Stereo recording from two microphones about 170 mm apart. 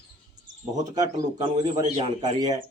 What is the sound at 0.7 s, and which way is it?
Speech, 20° right (ahead or behind).